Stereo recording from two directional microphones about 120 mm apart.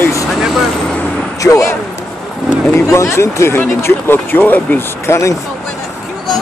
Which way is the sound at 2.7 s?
25° left (ahead or behind).